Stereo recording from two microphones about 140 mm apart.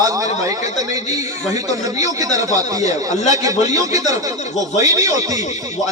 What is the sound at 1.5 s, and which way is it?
A man's voice, 25° right (ahead or behind).